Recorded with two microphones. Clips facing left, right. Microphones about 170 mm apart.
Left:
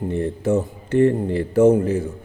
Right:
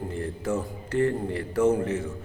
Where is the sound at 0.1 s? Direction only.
25° left (ahead or behind).